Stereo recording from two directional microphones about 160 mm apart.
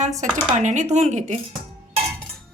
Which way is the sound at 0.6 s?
50° right (ahead or behind).